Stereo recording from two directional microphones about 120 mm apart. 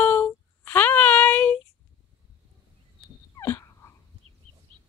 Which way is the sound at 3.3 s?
25° left (ahead or behind).